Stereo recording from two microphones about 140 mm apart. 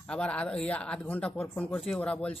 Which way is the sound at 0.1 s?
10° left (ahead or behind).